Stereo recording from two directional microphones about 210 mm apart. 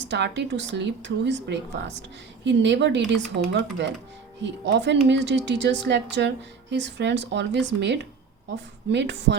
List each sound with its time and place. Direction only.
0.1 s speech: 55° right (ahead or behind)